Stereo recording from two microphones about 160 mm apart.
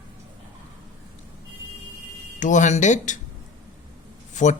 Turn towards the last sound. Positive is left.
turn(degrees=50)  # may be behind; listen again after turning